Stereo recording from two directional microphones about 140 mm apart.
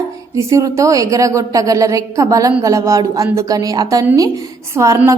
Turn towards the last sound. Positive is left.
turn(degrees=-20)  # may be behind; listen again after turning